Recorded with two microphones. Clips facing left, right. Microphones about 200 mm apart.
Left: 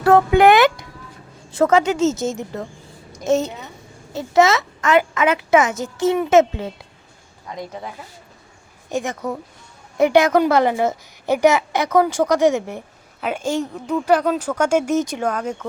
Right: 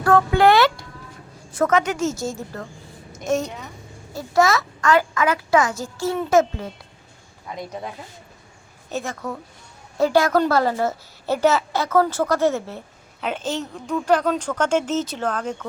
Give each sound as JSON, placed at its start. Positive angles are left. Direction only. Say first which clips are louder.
{"t": 0.0, "sound": "a child's voice", "louder": "left 3 dB", "side_deg": 20}
{"t": 8.9, "sound": "a woman's voice", "louder": "left 4 dB", "side_deg": 15}